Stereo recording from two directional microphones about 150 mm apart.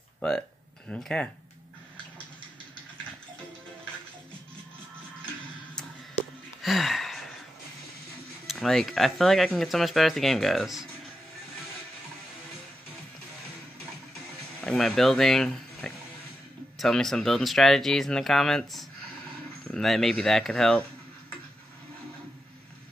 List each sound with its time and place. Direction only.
0.2 s speech: 5° left (ahead or behind)
6.6 s a sound: centre (ahead or behind)
8.5 s speech: centre (ahead or behind)
14.6 s speech: 5° left (ahead or behind)